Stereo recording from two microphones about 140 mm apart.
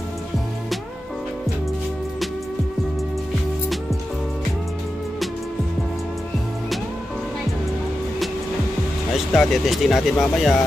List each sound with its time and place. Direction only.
9.1 s speech: centre (ahead or behind)